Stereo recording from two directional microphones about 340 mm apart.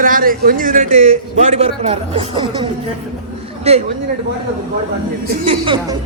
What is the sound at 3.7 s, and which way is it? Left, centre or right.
Speech, centre.